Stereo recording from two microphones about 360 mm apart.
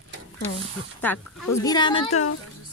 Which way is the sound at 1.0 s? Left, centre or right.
Centre.